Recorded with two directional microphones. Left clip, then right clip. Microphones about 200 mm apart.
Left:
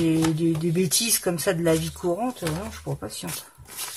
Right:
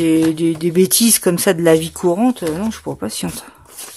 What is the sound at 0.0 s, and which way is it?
Speech, 50° right (ahead or behind).